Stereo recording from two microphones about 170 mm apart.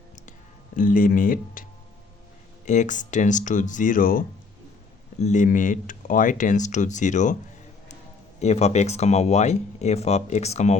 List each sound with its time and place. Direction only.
0.8 s speech: 50° left (ahead or behind)
2.6 s speech: 45° left (ahead or behind)
5.2 s speech: 45° left (ahead or behind)
8.4 s speech: 40° left (ahead or behind)